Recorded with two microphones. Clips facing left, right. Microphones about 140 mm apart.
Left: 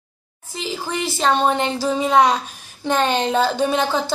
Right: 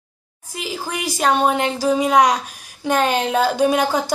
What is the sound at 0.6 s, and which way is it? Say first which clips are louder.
A woman's voice: left 1 dB; 5° right (ahead or behind).